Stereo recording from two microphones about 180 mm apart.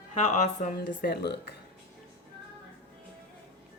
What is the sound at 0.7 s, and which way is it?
Speech, 55° left (ahead or behind).